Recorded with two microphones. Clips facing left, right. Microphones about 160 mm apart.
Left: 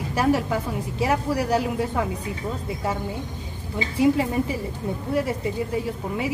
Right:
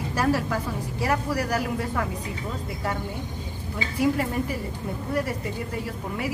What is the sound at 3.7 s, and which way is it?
A woman's voice, 20° left (ahead or behind).